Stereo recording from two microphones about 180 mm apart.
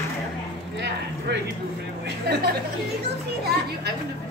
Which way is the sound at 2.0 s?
65° right (ahead or behind).